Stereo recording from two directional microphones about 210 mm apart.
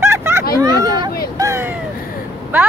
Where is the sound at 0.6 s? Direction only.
15° right (ahead or behind).